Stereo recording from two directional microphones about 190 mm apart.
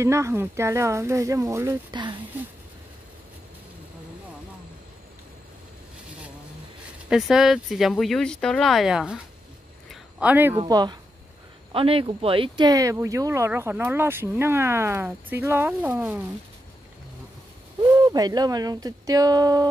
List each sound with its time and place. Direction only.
0.0 s speech: 15° right (ahead or behind)
7.1 s speech: 5° right (ahead or behind)
9.8 s a sound: 10° right (ahead or behind)
10.7 s speech: 20° right (ahead or behind)
17.9 s speech: 20° right (ahead or behind)